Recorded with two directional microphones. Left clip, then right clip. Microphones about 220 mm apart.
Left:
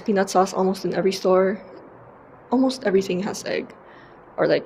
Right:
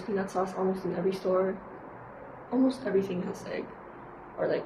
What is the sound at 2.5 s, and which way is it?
Speech, 50° left (ahead or behind).